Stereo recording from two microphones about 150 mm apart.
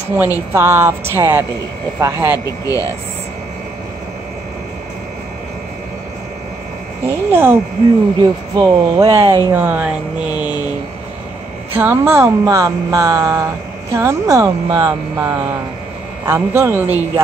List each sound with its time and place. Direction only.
0.5 s speech: 15° right (ahead or behind)
2.6 s speech: 25° left (ahead or behind)
7.1 s speech: 15° right (ahead or behind)
8.2 s speech: 25° right (ahead or behind); by 10.5 s 10° right (ahead or behind)
11.7 s speech: 15° right (ahead or behind)